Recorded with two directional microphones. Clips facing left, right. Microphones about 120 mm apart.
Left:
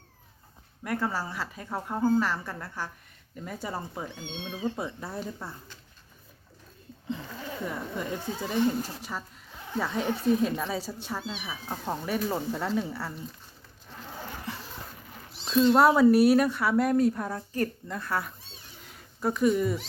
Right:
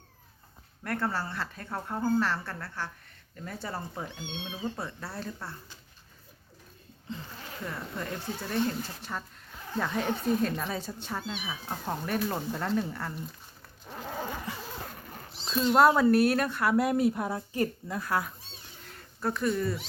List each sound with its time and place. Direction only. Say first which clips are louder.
0.9 s speech: left 1 dB; 10° left (ahead or behind)
4.1 s speech: left 1 dB; 15° right (ahead or behind)
4.8 s speech: left 3 dB; 15° left (ahead or behind)
7.6 s a woman's voice: left 2 dB; 15° left (ahead or behind)
15.8 s a woman's voice: even; 5° left (ahead or behind)
18.8 s cat: left 3 dB; 5° left (ahead or behind)